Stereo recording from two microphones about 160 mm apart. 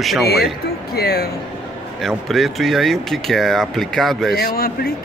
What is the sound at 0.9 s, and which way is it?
Speech, 80° left.